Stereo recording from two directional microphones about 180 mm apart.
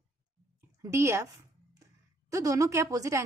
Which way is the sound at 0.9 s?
15° right (ahead or behind).